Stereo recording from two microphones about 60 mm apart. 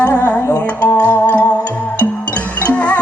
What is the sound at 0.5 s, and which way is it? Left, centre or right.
Music, left.